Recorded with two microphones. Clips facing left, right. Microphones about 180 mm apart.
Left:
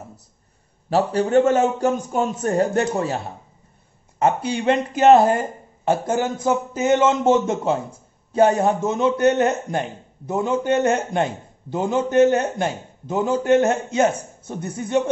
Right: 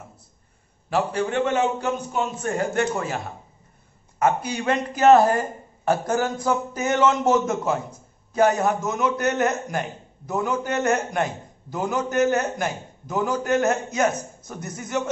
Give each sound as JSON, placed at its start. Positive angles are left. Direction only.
{"t": 0.8, "sound": "a man's voice", "side_deg": 35}